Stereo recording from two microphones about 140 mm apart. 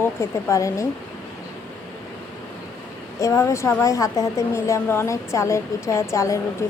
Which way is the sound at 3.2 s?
20° left (ahead or behind).